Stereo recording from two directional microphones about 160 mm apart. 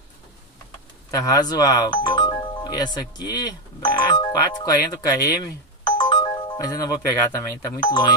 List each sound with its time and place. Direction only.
1.1 s speech: 20° left (ahead or behind)